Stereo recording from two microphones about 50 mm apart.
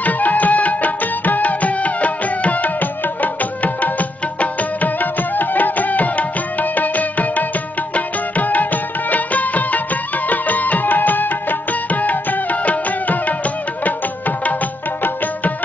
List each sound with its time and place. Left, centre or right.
0.0 s music: left